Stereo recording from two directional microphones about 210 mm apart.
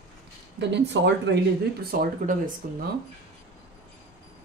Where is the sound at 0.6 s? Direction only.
55° right (ahead or behind).